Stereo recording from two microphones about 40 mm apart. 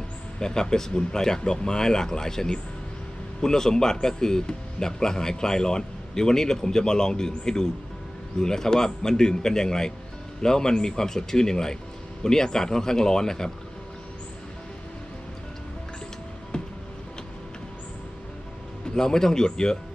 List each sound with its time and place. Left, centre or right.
0.4 s speech: centre
16.5 s music: centre
18.9 s speech: centre